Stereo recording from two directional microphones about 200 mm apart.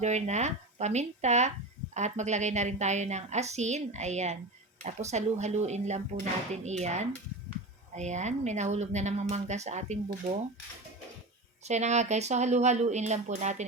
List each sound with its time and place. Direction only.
0.0 s speech: 35° right (ahead or behind)
11.6 s speech: 35° right (ahead or behind)